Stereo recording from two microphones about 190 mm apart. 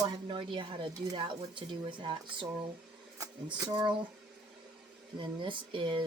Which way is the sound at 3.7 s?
20° right (ahead or behind).